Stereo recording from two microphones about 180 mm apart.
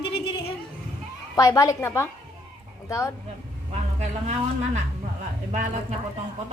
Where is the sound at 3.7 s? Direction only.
40° right (ahead or behind).